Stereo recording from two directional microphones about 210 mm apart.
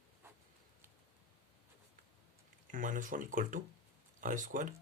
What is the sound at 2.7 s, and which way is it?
Speech, 40° right (ahead or behind).